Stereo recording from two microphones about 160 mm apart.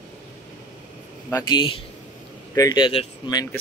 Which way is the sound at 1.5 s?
30° left (ahead or behind).